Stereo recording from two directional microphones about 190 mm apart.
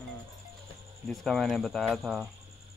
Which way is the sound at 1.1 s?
Centre (ahead or behind).